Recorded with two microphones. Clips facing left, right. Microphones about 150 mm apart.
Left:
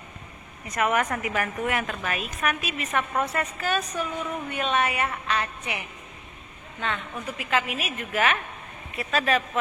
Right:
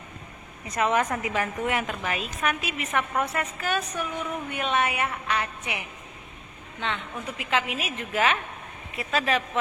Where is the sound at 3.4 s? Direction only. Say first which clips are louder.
Left 1 dB; 15° right (ahead or behind).